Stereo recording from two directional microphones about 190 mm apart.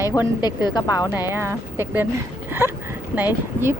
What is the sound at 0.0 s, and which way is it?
Speech, 20° left (ahead or behind).